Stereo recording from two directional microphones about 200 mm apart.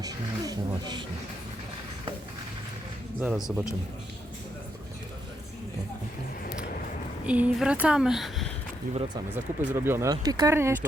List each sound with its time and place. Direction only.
0.0 s a sound: 20° right (ahead or behind)
3.2 s a woman's voice: 5° right (ahead or behind)
7.3 s a woman's voice: 5° right (ahead or behind)
9.3 s speech: 10° right (ahead or behind)